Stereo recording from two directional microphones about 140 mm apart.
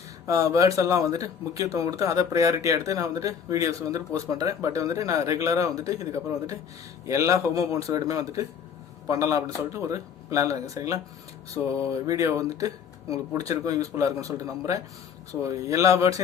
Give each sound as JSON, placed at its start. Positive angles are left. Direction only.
{"t": 0.3, "sound": "speech", "side_deg": -20}